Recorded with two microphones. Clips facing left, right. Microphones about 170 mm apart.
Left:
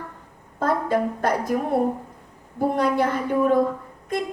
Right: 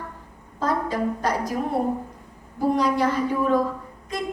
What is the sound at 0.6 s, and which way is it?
Speech, 55° left (ahead or behind).